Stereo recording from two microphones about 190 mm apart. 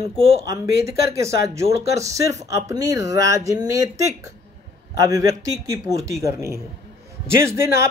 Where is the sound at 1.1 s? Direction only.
15° right (ahead or behind).